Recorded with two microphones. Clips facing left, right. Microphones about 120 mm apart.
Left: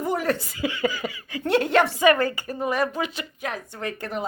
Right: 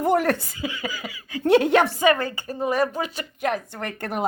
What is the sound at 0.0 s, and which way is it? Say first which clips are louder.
Chuckle: right 4 dB; 60° right (ahead or behind).